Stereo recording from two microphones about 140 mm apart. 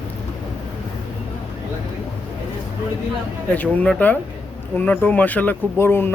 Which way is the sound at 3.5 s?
10° left (ahead or behind).